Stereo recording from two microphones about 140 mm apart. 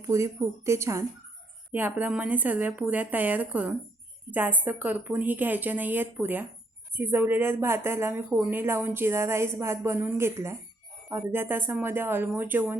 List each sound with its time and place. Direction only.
0.0 s speech: 25° right (ahead or behind)